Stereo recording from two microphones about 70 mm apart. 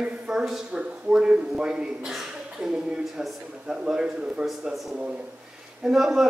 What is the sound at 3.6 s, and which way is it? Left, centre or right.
Speech, centre.